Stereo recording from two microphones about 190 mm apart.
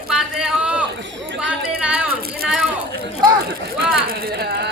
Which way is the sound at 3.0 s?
55° right (ahead or behind).